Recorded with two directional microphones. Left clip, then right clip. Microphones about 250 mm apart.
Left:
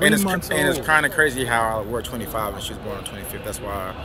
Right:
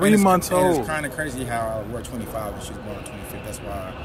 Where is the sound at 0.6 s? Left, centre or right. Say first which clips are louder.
Left 3 dB; centre.